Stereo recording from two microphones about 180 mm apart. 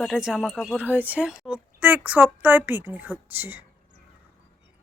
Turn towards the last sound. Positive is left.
turn(degrees=-10)  # may be behind; listen again after turning